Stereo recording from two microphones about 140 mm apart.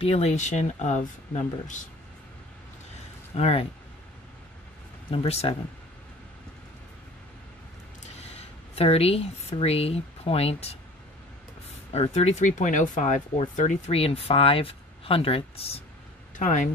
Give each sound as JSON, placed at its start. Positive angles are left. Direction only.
{"t": 0.0, "sound": "speech", "side_deg": 50}
{"t": 3.3, "sound": "speech", "side_deg": 50}
{"t": 5.1, "sound": "speech", "side_deg": 45}
{"t": 8.3, "sound": "speech", "side_deg": 45}
{"t": 11.9, "sound": "speech", "side_deg": 50}
{"t": 16.3, "sound": "speech", "side_deg": 65}